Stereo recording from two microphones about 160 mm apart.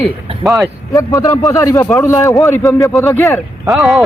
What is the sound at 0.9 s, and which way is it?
A man's voice, 20° left (ahead or behind).